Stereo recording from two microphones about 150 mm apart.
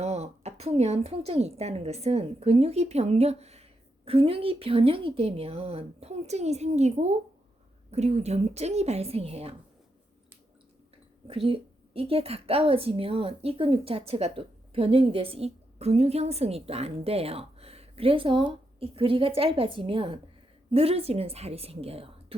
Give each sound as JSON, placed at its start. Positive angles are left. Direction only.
{"t": 0.0, "sound": "speech", "side_deg": -45}
{"t": 11.3, "sound": "a woman's voice", "side_deg": -35}